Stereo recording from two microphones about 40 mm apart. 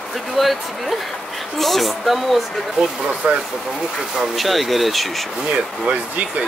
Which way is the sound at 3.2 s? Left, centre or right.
Centre.